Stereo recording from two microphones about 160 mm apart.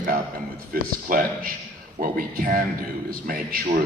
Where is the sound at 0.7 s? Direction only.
60° right (ahead or behind).